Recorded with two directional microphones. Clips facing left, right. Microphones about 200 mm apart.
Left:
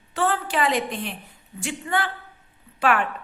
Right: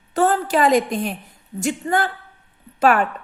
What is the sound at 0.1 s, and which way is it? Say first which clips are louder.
A woman's voice: right 6 dB; 40° right (ahead or behind).